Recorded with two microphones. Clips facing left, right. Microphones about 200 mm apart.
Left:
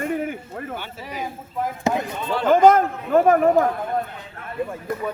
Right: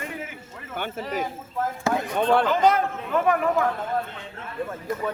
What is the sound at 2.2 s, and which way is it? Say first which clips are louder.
Speech: right 6 dB; 60° right (ahead or behind).